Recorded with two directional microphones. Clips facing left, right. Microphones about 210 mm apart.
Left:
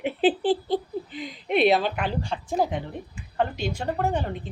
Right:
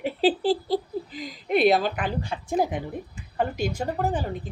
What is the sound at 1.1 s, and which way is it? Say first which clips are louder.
Speech: left 1 dB; 40° right (ahead or behind).